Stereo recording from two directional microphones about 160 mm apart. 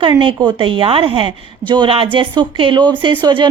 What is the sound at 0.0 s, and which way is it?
A woman's voice, 30° right (ahead or behind).